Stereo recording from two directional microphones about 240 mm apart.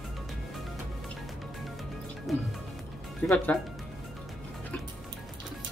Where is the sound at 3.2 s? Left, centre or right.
Centre.